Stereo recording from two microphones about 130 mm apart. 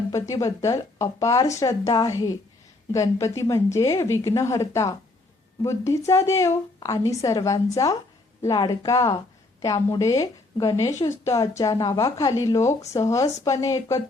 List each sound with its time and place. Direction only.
0.1 s a woman's voice: 25° left (ahead or behind)